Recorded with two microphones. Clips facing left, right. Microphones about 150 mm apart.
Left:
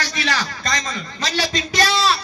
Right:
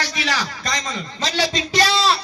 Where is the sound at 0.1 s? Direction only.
10° right (ahead or behind).